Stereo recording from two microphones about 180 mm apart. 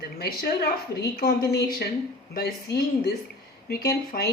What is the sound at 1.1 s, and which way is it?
Speech, 60° left (ahead or behind).